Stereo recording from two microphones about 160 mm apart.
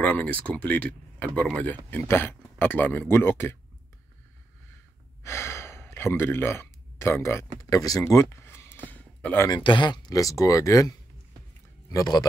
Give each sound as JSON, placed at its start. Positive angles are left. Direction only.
{"t": 0.0, "sound": "speech", "side_deg": 10}
{"t": 5.2, "sound": "speech", "side_deg": 15}
{"t": 8.9, "sound": "a sound", "side_deg": 10}
{"t": 9.5, "sound": "speech", "side_deg": 30}